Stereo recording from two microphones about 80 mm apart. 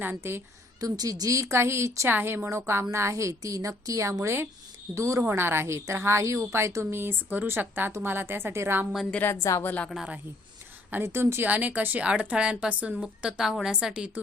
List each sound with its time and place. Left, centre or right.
0.0 s a woman's voice: right
0.8 s a woman's voice: right
8.9 s a woman's voice: centre
9.3 s a woman's voice: left
9.6 s a woman's voice: centre
10.9 s a woman's voice: right
11.4 s a woman's voice: centre